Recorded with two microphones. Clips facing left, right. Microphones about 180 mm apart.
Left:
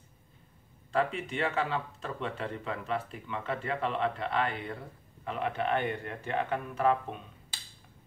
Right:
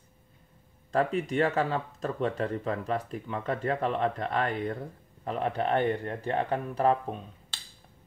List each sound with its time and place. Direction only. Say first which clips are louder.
0.9 s speech: right 4 dB; 40° right (ahead or behind)